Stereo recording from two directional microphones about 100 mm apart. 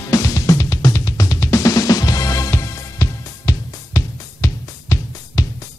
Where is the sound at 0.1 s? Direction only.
35° left (ahead or behind).